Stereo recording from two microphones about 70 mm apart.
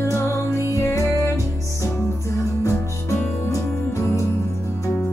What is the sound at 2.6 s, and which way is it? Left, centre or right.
Music, left.